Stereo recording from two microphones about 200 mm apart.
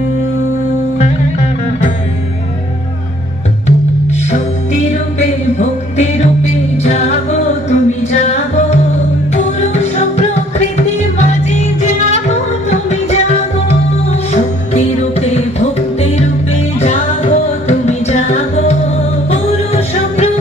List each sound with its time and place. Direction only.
3.6 s music: 35° left (ahead or behind)
12.3 s music: 35° left (ahead or behind)